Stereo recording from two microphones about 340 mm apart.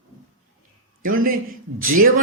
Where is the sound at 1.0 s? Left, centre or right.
Right.